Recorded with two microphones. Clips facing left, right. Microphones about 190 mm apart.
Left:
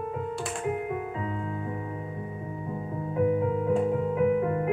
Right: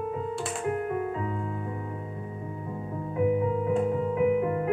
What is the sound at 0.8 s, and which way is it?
Music, 10° left (ahead or behind).